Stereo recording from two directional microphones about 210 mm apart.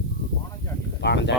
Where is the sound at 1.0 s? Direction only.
55° left (ahead or behind).